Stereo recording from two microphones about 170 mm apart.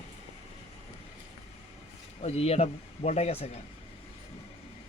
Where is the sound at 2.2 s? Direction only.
35° left (ahead or behind).